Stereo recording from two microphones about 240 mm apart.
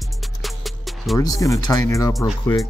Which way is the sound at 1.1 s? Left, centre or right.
Centre.